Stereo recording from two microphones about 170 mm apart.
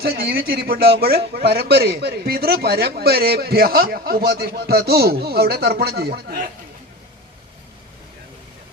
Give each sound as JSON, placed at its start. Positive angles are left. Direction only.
{"t": 0.0, "sound": "a man's voice", "side_deg": -65}